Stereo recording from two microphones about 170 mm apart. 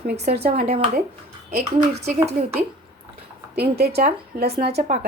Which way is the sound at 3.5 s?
70° right (ahead or behind).